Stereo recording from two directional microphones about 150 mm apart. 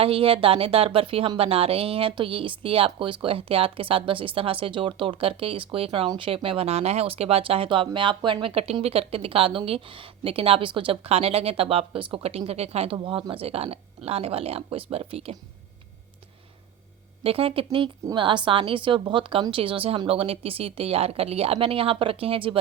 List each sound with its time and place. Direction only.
0.0 s speech: 40° right (ahead or behind)
17.2 s speech: 40° right (ahead or behind)